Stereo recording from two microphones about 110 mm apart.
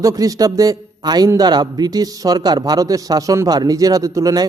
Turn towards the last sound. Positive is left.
turn(degrees=-30)  # may be behind; listen again after turning